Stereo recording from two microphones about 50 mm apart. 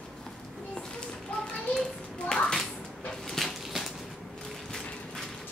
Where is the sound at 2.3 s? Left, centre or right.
Centre.